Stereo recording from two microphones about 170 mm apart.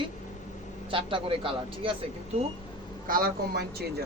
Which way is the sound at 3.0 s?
60° right (ahead or behind).